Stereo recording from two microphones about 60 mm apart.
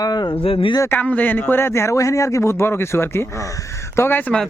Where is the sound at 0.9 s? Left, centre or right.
Left.